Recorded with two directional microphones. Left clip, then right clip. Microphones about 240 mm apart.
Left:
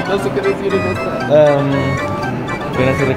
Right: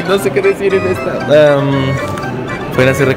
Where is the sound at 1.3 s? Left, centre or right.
Right.